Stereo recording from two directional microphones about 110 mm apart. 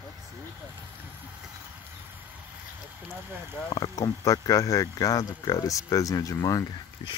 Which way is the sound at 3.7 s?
40° left (ahead or behind).